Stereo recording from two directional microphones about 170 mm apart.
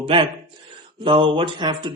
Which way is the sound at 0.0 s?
25° right (ahead or behind).